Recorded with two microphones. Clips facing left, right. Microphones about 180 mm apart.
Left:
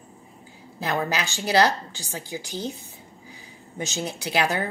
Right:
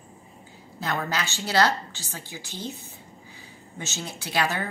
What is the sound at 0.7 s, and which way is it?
A woman's voice, 15° left (ahead or behind).